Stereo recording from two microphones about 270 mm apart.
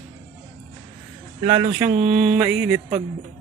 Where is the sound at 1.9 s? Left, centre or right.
Right.